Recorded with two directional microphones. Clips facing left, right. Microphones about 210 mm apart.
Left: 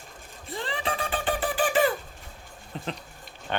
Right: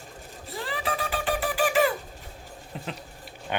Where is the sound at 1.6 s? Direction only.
30° left (ahead or behind).